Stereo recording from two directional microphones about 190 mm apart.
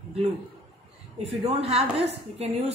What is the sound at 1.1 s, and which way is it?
A woman's voice, 35° right (ahead or behind).